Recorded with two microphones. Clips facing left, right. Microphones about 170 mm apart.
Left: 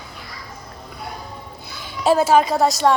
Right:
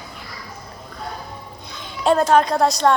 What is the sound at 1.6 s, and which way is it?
A woman's voice, 5° left (ahead or behind).